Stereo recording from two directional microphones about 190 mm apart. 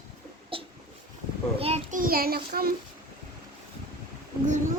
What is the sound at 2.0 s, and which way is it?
Speech, 50° right (ahead or behind).